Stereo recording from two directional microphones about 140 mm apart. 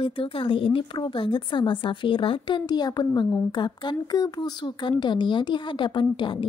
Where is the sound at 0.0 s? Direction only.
40° left (ahead or behind).